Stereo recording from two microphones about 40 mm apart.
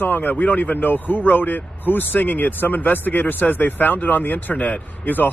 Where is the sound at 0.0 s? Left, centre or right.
Left.